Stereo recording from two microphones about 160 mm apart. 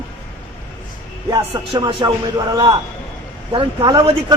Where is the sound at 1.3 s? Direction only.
30° right (ahead or behind).